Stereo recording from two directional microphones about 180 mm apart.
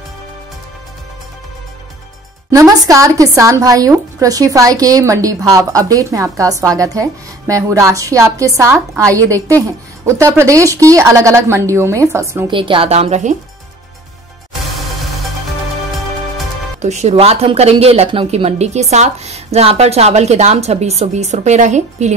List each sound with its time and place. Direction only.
2.5 s a woman's voice: 20° right (ahead or behind)
12.4 s speech: 30° right (ahead or behind)
16.8 s speech: 40° right (ahead or behind)